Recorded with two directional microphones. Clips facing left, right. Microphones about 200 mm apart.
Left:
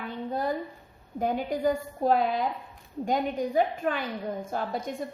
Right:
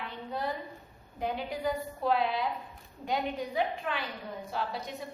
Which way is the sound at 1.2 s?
45° left (ahead or behind).